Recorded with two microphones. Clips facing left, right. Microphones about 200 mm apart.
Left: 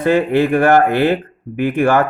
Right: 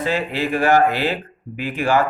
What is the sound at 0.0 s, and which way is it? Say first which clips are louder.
Speech: left 8 dB; 55° left (ahead or behind).